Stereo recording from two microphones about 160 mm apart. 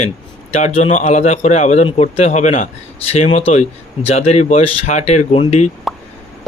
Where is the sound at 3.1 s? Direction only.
40° left (ahead or behind).